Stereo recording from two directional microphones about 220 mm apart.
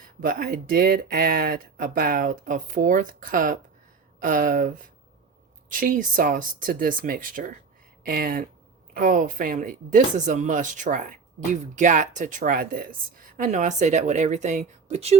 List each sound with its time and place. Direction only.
0.0 s speech: 40° right (ahead or behind)